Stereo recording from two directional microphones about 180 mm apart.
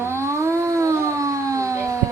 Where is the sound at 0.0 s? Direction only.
15° right (ahead or behind).